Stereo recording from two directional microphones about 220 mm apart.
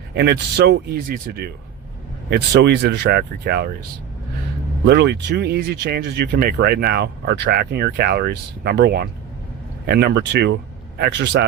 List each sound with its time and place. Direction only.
0.1 s speech: 50° right (ahead or behind)
4.9 s speech: 50° right (ahead or behind)